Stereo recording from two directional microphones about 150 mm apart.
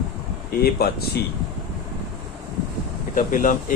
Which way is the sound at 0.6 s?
90° left.